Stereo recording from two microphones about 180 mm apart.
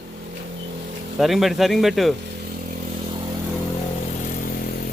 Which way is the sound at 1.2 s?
Centre (ahead or behind).